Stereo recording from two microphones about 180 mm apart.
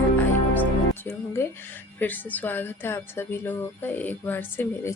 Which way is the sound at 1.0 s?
15° left (ahead or behind).